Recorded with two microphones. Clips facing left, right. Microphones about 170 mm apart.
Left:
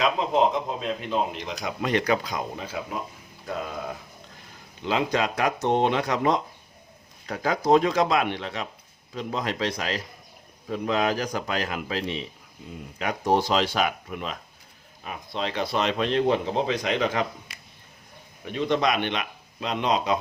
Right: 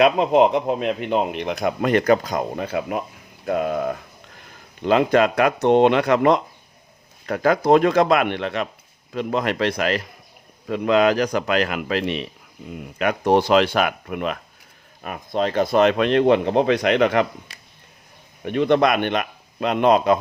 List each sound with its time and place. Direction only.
0.0 s speech: 65° right (ahead or behind)
10.7 s a man's voice: 75° right (ahead or behind)
15.0 s speech: 50° right (ahead or behind)
18.4 s speech: 60° right (ahead or behind)